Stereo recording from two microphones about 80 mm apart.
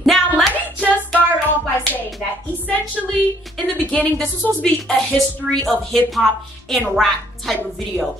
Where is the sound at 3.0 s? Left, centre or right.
Centre.